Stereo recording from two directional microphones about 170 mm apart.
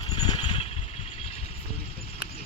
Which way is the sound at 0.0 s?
30° left (ahead or behind).